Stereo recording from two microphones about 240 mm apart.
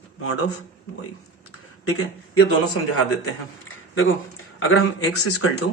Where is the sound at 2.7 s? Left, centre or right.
Left.